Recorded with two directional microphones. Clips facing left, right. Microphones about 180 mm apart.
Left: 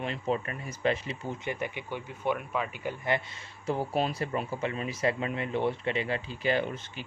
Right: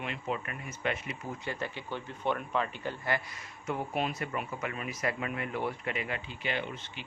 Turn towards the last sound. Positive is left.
turn(degrees=40)  # may be behind; listen again after turning